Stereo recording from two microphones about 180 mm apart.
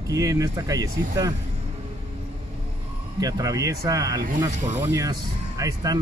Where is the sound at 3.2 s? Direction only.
20° right (ahead or behind).